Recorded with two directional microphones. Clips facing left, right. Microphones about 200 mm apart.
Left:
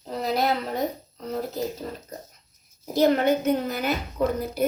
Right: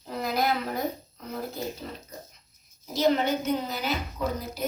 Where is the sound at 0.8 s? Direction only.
35° left (ahead or behind).